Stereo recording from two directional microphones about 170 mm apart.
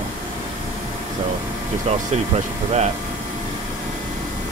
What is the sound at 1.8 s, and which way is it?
Speech, 40° right (ahead or behind).